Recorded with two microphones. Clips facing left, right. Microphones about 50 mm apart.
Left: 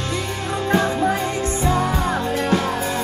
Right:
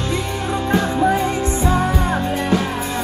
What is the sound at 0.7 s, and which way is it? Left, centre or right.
Music, centre.